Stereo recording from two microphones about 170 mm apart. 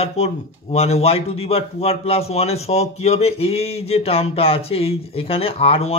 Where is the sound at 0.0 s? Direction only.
40° left (ahead or behind).